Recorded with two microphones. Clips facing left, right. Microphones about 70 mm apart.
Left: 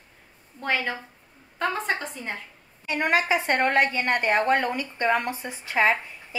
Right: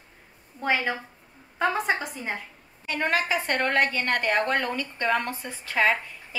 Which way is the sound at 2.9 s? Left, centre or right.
Centre.